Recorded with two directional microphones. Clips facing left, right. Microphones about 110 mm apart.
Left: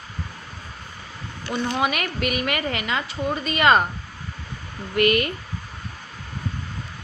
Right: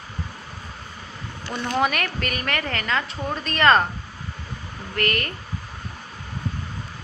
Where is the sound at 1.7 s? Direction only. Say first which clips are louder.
Right 5 dB; 5° left (ahead or behind).